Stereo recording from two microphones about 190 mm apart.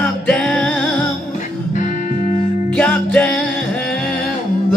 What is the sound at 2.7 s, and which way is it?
Music, 5° left (ahead or behind).